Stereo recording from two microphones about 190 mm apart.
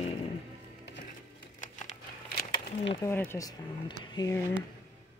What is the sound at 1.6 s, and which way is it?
Crumpling, 40° left (ahead or behind).